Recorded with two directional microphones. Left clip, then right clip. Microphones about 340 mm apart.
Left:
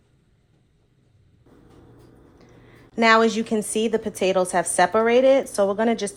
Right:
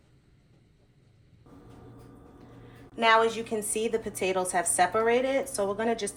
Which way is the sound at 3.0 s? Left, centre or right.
Left.